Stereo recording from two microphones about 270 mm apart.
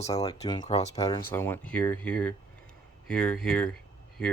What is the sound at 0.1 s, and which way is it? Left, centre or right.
Speech, centre.